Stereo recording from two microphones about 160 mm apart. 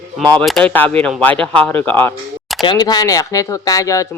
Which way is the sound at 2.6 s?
25° left (ahead or behind).